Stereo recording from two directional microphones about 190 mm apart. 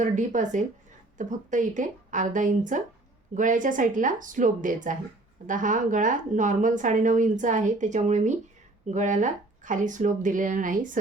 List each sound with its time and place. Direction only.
0.0 s a woman's voice: 40° right (ahead or behind)